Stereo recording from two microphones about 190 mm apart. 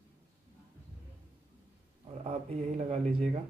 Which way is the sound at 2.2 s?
35° right (ahead or behind).